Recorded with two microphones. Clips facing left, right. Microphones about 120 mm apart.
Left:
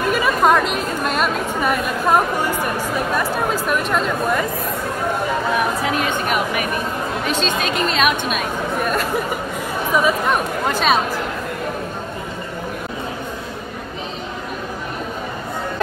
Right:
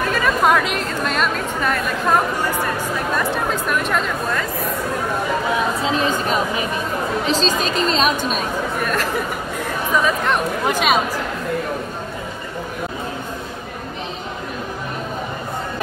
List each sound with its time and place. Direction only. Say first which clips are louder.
0.4 s a woman's voice: left 1 dB; centre (ahead or behind)
5.6 s speech: even; 25° right (ahead or behind)
8.7 s a woman's voice: left 3 dB; centre (ahead or behind)
10.7 s speech: left 1 dB; 10° right (ahead or behind)